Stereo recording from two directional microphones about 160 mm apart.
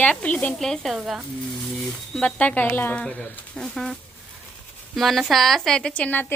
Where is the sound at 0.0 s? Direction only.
10° left (ahead or behind).